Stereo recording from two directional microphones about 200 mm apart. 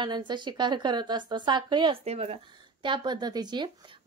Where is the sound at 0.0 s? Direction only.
20° right (ahead or behind).